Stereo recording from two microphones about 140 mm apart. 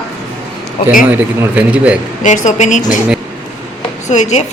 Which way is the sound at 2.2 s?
60° left (ahead or behind).